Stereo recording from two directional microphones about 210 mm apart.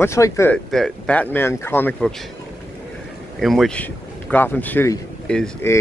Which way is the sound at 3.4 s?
Centre (ahead or behind).